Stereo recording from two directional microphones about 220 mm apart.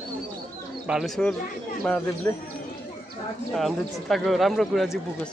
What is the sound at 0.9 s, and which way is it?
Speech, centre (ahead or behind).